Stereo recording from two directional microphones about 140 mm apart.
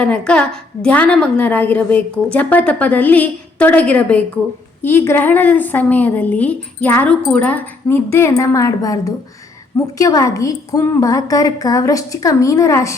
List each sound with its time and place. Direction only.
0.0 s a woman's voice: 5° left (ahead or behind)